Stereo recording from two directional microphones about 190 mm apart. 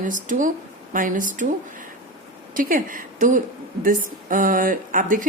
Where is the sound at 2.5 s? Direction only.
45° right (ahead or behind).